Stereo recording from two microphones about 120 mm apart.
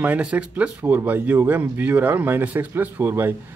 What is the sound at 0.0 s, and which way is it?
Speech, 10° right (ahead or behind).